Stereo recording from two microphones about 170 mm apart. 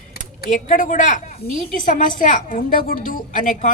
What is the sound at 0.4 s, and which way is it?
Speech, 50° left (ahead or behind).